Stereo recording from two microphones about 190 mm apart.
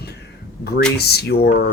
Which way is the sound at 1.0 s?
60° left (ahead or behind).